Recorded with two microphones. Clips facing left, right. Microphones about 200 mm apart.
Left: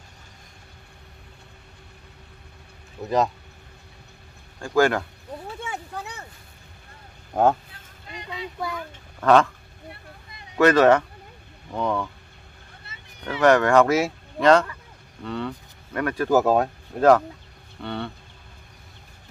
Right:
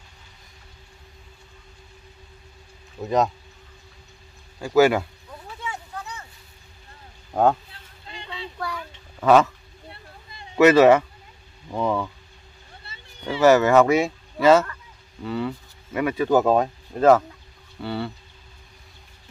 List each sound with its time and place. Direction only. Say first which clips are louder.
3.0 s speech: right 1 dB; centre (ahead or behind)
4.6 s speech: right 3 dB; 5° right (ahead or behind)
5.7 s a sound: left 1 dB; 65° left (ahead or behind)
7.3 s speech: even; 5° right (ahead or behind)
8.1 s child singing: left 2 dB; 30° right (ahead or behind)
9.2 s speech: right 1 dB; 5° right (ahead or behind)
10.6 s speech: right 2 dB; 10° right (ahead or behind)
12.8 s a sound: right 2 dB; 30° right (ahead or behind)
13.4 s speech: right 1 dB; 5° right (ahead or behind)
16.3 s speech: even; 5° left (ahead or behind)